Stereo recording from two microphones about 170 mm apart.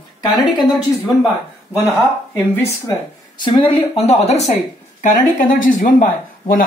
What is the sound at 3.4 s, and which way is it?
Speech, 30° left (ahead or behind).